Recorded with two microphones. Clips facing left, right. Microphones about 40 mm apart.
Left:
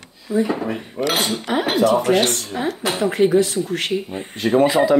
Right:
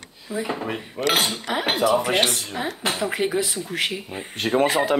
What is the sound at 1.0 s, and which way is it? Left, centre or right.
Speech, right.